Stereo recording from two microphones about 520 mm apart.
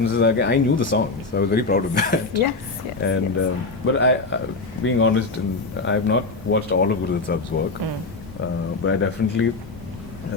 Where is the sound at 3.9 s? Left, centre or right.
Left.